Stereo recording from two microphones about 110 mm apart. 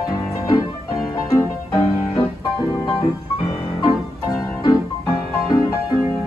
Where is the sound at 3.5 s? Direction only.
40° left (ahead or behind).